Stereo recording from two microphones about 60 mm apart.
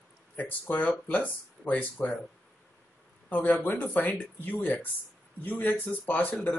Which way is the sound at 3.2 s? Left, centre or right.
Left.